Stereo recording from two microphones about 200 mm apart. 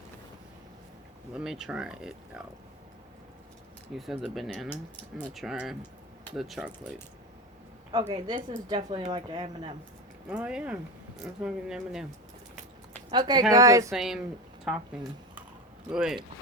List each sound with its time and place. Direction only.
1.3 s speech: 5° right (ahead or behind)
3.9 s speech: centre (ahead or behind)
7.9 s a woman's voice: 20° right (ahead or behind)
10.2 s speech: 5° right (ahead or behind)
13.1 s speech: 20° right (ahead or behind)
13.9 s speech: centre (ahead or behind)
15.9 s speech: 5° right (ahead or behind)